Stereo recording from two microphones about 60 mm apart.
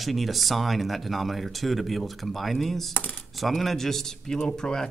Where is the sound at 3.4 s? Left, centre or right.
Centre.